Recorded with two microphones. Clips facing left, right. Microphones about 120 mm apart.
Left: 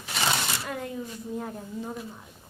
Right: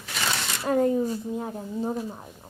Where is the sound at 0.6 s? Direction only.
35° right (ahead or behind).